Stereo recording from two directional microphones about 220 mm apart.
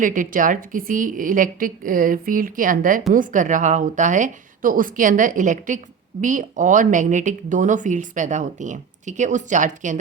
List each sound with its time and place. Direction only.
0.0 s speech: 35° right (ahead or behind)